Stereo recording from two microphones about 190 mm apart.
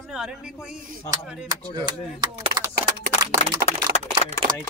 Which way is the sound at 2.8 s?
55° right (ahead or behind).